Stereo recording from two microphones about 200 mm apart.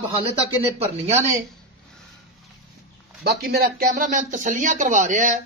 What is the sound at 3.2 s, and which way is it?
Speech, 50° right (ahead or behind).